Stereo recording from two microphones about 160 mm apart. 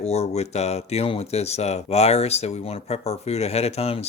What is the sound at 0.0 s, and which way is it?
Speech, 40° left (ahead or behind).